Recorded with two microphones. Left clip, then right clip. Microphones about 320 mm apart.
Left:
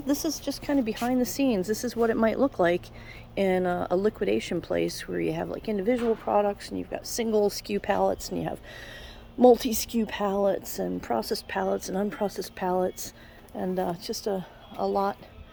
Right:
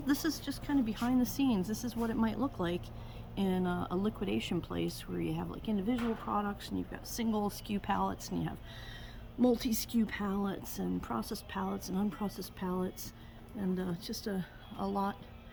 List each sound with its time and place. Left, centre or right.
0.0 s speech: centre
9.6 s speech: centre